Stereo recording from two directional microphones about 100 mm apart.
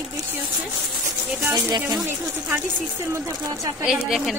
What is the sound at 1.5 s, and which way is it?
Speech, 45° right (ahead or behind).